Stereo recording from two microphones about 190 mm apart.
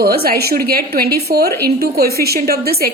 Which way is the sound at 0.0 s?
55° right (ahead or behind).